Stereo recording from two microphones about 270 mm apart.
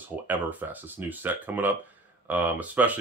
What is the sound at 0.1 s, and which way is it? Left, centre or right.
Speech, centre.